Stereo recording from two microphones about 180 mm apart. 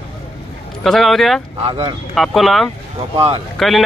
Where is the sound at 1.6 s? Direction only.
30° right (ahead or behind).